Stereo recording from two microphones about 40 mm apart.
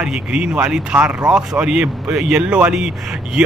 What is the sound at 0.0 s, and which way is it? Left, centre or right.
Speech, right.